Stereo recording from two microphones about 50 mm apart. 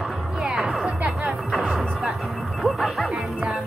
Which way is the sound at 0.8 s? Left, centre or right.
Centre.